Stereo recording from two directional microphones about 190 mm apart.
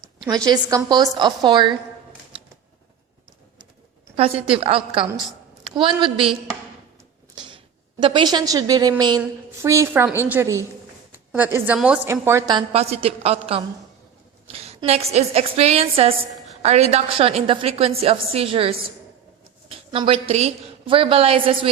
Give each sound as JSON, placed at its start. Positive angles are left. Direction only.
{"t": 0.4, "sound": "a woman's voice", "side_deg": -20}
{"t": 4.2, "sound": "a woman's voice", "side_deg": -30}
{"t": 7.3, "sound": "a woman's voice", "side_deg": -25}
{"t": 12.7, "sound": "a woman's voice", "side_deg": -30}